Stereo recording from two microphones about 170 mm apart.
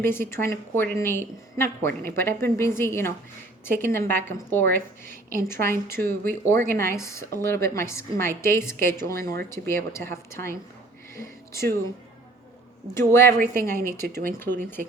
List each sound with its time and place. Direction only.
0.0 s a woman's voice: 15° left (ahead or behind)
12.9 s a woman's voice: 15° left (ahead or behind)